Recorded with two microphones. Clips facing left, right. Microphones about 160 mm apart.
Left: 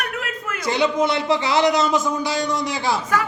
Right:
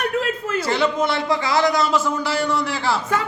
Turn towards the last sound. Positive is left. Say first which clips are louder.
# right 1 dB
turn(degrees=15)  # may be behind; listen again after turning